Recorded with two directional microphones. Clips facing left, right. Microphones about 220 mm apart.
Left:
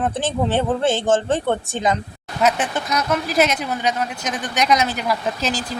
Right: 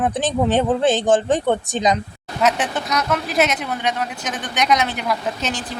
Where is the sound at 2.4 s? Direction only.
Centre (ahead or behind).